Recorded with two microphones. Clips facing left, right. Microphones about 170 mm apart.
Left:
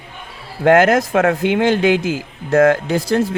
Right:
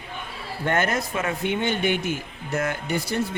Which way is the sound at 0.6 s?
90° left.